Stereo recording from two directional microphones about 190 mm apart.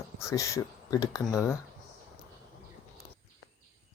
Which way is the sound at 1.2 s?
Centre (ahead or behind).